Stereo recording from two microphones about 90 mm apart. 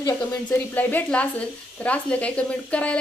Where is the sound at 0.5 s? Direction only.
20° left (ahead or behind).